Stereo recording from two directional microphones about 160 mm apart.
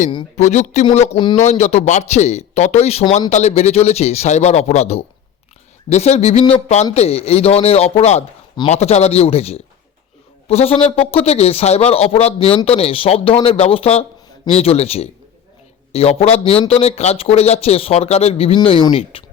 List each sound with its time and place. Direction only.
0.3 s speech: 45° left (ahead or behind)